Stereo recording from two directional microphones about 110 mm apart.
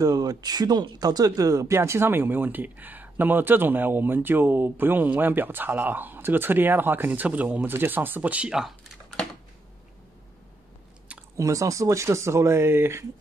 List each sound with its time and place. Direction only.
0.0 s speech: 35° right (ahead or behind); by 8.7 s 5° right (ahead or behind)
11.3 s speech: 30° right (ahead or behind)